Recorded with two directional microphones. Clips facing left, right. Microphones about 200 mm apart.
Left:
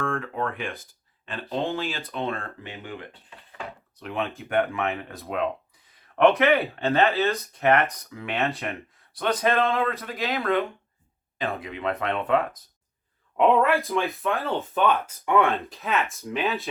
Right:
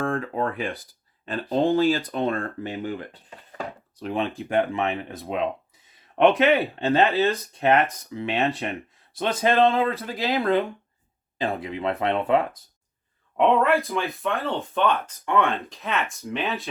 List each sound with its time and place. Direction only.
0.0 s speech: 35° right (ahead or behind)
4.7 s speech: 20° right (ahead or behind)
6.4 s speech: 30° right (ahead or behind)
13.3 s speech: centre (ahead or behind)